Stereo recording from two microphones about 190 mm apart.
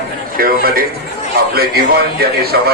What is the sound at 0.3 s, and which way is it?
A man's voice, 50° right (ahead or behind).